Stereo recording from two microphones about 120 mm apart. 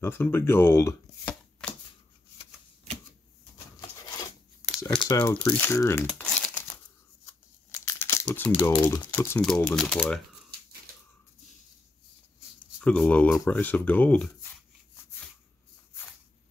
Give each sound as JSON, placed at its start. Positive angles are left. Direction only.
{"t": 0.0, "sound": "speech", "side_deg": 15}
{"t": 4.0, "sound": "a sound", "side_deg": 30}
{"t": 4.9, "sound": "speech", "side_deg": 35}
{"t": 5.2, "sound": "speech", "side_deg": 15}
{"t": 6.2, "sound": "crumpling", "side_deg": 5}
{"t": 7.2, "sound": "crumpling", "side_deg": 25}
{"t": 8.6, "sound": "speech", "side_deg": 20}
{"t": 9.8, "sound": "speech", "side_deg": 5}
{"t": 12.5, "sound": "a sound", "side_deg": 10}
{"t": 13.5, "sound": "speech", "side_deg": 15}